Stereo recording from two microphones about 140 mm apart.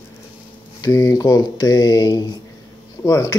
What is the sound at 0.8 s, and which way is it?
Speech, 25° left (ahead or behind).